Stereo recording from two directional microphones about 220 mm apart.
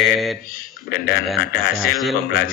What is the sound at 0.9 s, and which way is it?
Speech, 45° left (ahead or behind).